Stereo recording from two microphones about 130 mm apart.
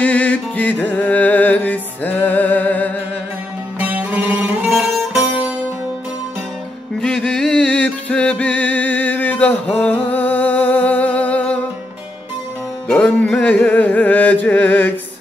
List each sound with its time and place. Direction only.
0.0 s music: 10° left (ahead or behind)
3.8 s music: 10° right (ahead or behind)
4.7 s music: centre (ahead or behind)
7.0 s music: 5° left (ahead or behind)
12.8 s music: 10° left (ahead or behind)